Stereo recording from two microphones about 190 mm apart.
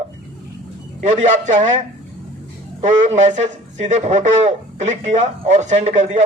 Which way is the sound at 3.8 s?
35° right (ahead or behind).